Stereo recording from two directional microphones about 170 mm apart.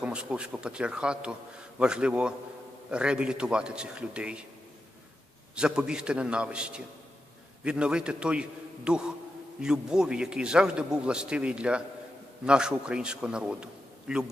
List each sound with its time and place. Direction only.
0.0 s a man's voice: 5° right (ahead or behind)
5.5 s a man's voice: 5° right (ahead or behind)